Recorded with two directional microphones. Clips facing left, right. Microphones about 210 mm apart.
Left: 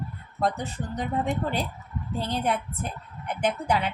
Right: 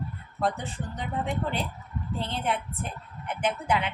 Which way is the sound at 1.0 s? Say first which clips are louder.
Left 3 dB; 40° left (ahead or behind).